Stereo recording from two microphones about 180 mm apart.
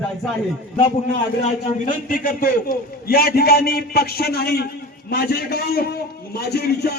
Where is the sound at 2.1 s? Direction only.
50° left (ahead or behind).